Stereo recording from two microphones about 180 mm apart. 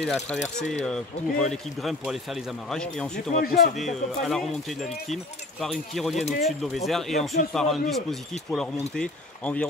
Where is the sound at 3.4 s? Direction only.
55° left (ahead or behind).